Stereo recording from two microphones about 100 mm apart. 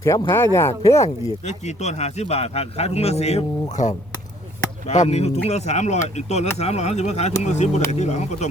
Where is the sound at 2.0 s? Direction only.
90° left.